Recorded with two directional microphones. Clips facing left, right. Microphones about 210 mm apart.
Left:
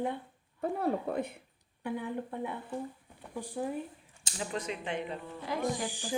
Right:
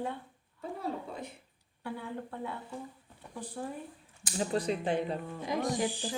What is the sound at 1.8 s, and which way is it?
Speech, 15° left (ahead or behind).